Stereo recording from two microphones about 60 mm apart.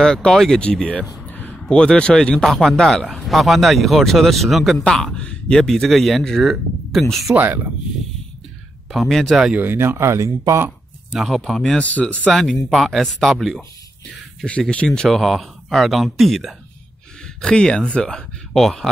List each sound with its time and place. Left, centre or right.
0.0 s speech: centre
0.6 s speech: centre
1.3 s a sound: left
1.7 s speech: centre
2.4 s speech: centre
4.8 s speech: centre
7.3 s speech: right
8.9 s speech: centre
9.6 s speech: right
11.1 s speech: centre
11.8 s speech: left
12.3 s speech: centre
14.7 s speech: centre
17.4 s speech: centre